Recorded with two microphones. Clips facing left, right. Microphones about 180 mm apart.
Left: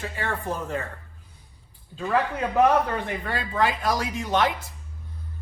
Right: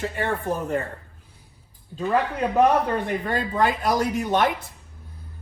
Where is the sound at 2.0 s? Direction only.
20° right (ahead or behind).